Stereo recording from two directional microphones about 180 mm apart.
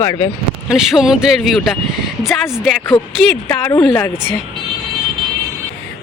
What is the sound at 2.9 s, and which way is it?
Speech, 15° left (ahead or behind).